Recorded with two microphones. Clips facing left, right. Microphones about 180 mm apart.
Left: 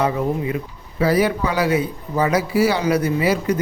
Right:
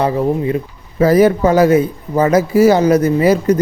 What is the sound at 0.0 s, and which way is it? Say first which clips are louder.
A man's voice: right 5 dB; 35° right (ahead or behind).